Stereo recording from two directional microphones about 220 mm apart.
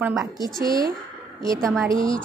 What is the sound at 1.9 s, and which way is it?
Speech, 20° left (ahead or behind).